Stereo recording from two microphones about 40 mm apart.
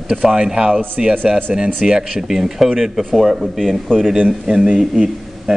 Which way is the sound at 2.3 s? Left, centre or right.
Centre.